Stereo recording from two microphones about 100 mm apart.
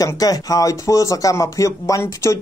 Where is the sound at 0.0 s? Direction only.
35° left (ahead or behind).